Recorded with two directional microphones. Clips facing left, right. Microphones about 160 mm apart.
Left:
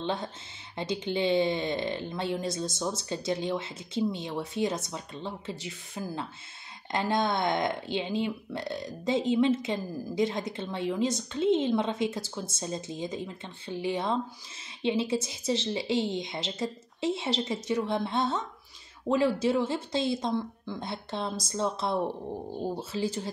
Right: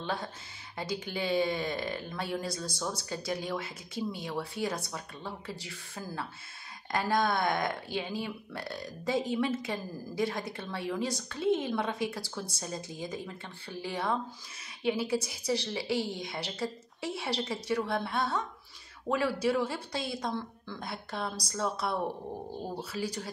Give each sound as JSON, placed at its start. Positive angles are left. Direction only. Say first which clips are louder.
{"t": 0.0, "sound": "speech", "louder": "left 3 dB", "side_deg": 20}